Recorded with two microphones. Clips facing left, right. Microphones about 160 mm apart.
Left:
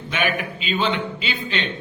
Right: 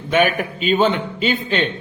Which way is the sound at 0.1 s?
50° right (ahead or behind).